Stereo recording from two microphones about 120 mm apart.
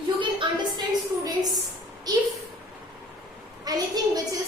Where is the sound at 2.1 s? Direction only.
35° right (ahead or behind).